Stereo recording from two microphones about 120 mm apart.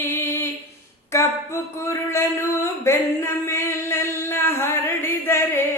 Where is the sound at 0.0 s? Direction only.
20° left (ahead or behind).